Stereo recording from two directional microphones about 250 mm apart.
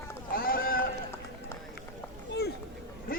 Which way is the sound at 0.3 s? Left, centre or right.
Left.